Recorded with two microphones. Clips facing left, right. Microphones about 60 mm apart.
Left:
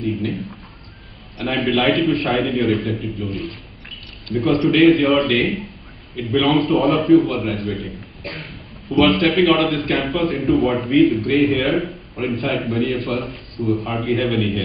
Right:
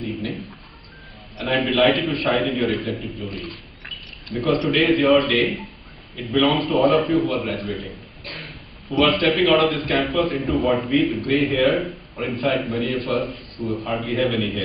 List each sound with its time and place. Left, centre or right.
0.0 s a man's voice: centre
4.3 s a man's voice: centre
8.2 s a sound: left
8.8 s a man's voice: centre